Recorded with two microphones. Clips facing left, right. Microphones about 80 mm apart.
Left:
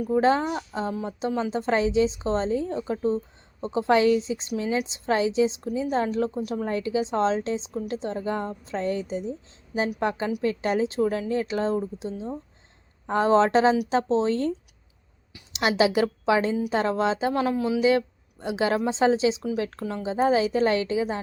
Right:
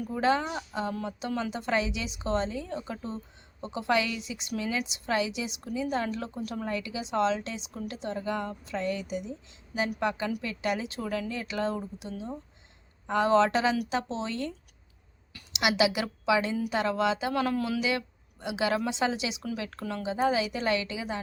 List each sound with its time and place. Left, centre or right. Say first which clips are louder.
0.1 s a woman's voice: left 5 dB; left
6.7 s a woman's voice: left 7 dB; left
15.5 s a woman's voice: left 4 dB; left
17.4 s a man's voice: left 6 dB; left